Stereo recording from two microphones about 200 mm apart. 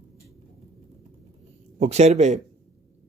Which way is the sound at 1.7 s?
35° right (ahead or behind).